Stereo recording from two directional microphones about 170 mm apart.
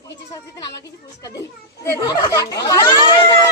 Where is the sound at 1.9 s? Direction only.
20° left (ahead or behind).